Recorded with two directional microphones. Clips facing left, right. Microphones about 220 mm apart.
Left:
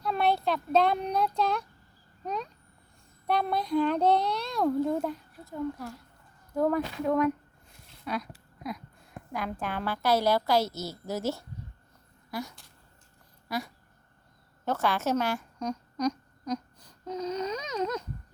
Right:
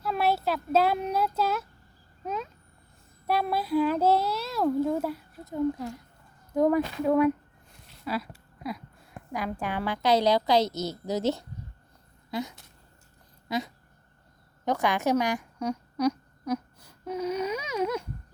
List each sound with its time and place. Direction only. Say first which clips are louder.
0.0 s a child's voice: even; 5° right (ahead or behind)
5.5 s a woman's voice: right 6 dB; 20° right (ahead or behind)
7.7 s a sound: right 2 dB; 5° right (ahead or behind)
9.6 s a woman's voice: right 2 dB; 15° right (ahead or behind)